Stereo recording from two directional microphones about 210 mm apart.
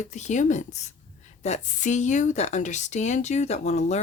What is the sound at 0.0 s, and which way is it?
Speech, 35° left (ahead or behind).